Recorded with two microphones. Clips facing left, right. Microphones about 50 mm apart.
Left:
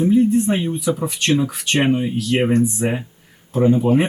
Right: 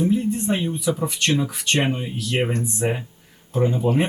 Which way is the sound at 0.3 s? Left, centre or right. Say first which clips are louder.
Left 5 dB; centre.